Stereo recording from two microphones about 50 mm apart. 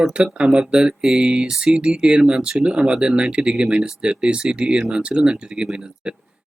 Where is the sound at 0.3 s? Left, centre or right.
Centre.